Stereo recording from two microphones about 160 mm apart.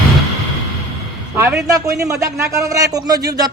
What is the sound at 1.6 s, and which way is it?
A man's voice, 20° right (ahead or behind).